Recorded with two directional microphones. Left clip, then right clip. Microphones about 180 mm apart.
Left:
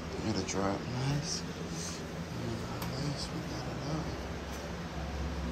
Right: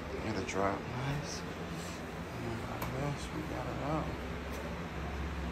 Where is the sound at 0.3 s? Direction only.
20° left (ahead or behind).